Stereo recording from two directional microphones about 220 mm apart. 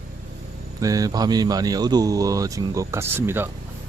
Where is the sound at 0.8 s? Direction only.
15° right (ahead or behind).